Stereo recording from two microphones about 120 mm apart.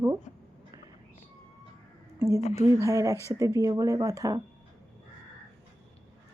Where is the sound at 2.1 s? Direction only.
25° right (ahead or behind).